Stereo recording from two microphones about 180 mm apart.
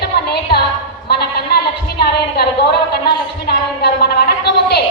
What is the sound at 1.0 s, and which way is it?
A woman's voice, 60° left (ahead or behind).